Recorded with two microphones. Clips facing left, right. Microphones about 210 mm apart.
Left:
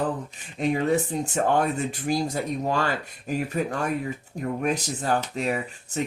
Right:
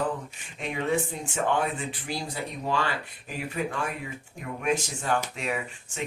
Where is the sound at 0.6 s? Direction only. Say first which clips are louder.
Left 5 dB; 40° left (ahead or behind).